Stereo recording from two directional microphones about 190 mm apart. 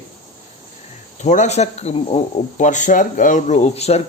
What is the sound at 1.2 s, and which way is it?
Speech, 40° left (ahead or behind).